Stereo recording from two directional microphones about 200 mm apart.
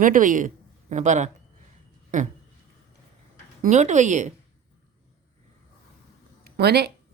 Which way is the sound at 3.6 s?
35° right (ahead or behind).